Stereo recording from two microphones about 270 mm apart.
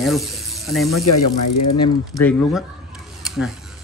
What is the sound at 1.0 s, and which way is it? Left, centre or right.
Speech, left.